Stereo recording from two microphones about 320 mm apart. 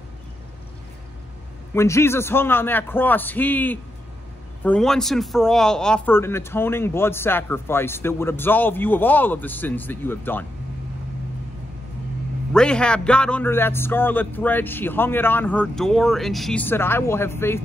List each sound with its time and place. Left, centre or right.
1.7 s a man's voice: centre
12.5 s speech: centre